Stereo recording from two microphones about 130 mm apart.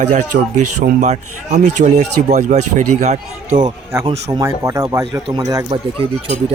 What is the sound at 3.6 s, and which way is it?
Speech, 35° right (ahead or behind).